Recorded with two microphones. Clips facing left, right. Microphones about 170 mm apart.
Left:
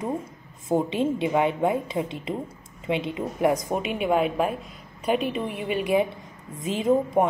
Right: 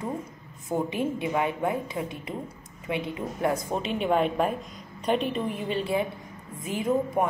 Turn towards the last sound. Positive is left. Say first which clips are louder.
# left 4 dB
turn(degrees=20)  # may be behind; listen again after turning